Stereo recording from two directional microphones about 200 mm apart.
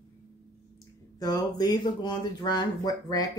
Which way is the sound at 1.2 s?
20° left (ahead or behind).